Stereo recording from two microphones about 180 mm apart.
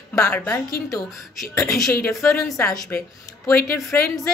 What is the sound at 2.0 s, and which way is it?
Speech, 10° left (ahead or behind).